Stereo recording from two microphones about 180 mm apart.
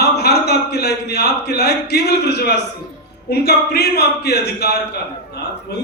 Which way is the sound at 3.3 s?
60° left (ahead or behind).